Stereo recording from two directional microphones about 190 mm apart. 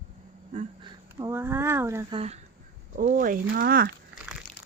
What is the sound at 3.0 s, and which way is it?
Speech, 45° right (ahead or behind).